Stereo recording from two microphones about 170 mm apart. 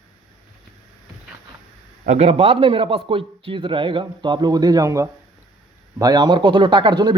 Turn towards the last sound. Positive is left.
turn(degrees=-25)  # may be behind; listen again after turning